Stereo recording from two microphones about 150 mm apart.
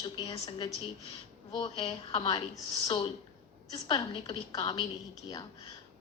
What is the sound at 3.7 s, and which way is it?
A woman's voice, 25° left (ahead or behind).